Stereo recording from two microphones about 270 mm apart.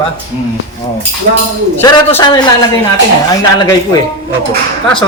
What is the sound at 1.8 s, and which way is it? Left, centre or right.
Speech, centre.